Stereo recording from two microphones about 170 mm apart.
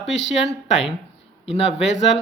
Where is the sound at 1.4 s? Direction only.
35° left (ahead or behind).